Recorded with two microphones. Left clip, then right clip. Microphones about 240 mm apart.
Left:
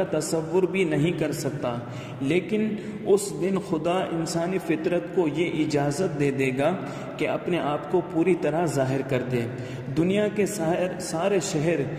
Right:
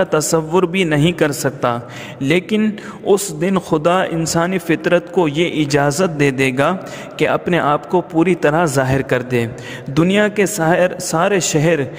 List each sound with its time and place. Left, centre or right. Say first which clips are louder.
0.0 s a man's voice: right 10 dB; right